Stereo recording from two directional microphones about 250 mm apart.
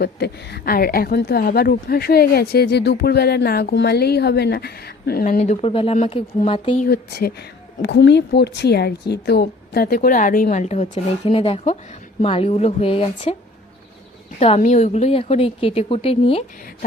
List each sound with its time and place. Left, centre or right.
0.0 s a woman's voice: left
6.8 s a woman's voice: left
14.3 s a woman's voice: left